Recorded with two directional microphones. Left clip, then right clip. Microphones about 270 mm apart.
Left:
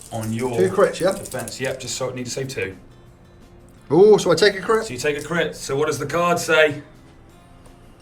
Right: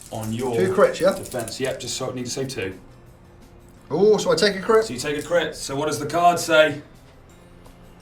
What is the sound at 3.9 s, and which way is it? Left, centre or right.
Speech, left.